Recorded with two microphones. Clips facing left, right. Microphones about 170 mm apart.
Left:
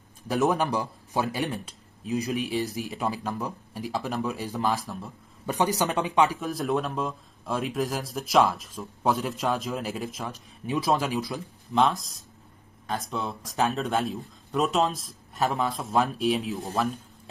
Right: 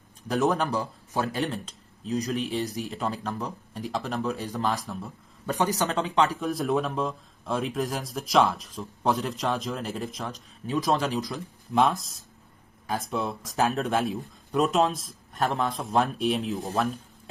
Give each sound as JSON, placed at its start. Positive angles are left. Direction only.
{"t": 0.5, "sound": "speech", "side_deg": 15}
{"t": 5.5, "sound": "speech", "side_deg": 15}
{"t": 6.4, "sound": "speech", "side_deg": 0}